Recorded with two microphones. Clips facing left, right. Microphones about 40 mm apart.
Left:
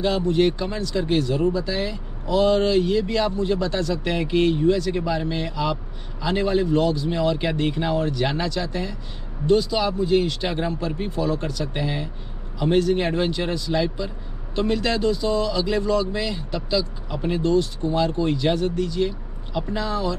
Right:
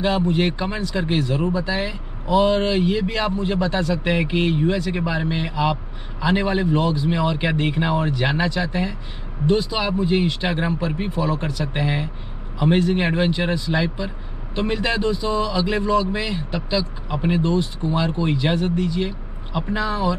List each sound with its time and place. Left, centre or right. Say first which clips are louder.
0.0 s speech: even; right